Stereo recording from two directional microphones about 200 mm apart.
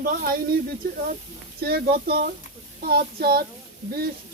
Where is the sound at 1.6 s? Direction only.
50° right (ahead or behind).